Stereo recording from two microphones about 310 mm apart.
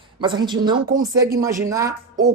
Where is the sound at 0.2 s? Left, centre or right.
Centre.